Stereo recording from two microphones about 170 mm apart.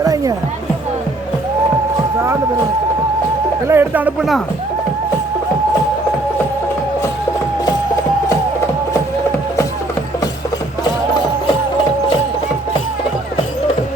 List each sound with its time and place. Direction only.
0.0 s music: 20° right (ahead or behind)
3.7 s speech: 10° right (ahead or behind)